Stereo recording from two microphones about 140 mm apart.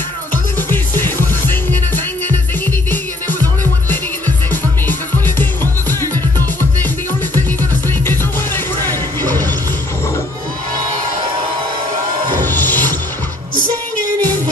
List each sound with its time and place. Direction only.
0.6 s music: 15° left (ahead or behind)
4.5 s music: 15° left (ahead or behind)
8.0 s music: 15° left (ahead or behind)
12.4 s music: 15° left (ahead or behind)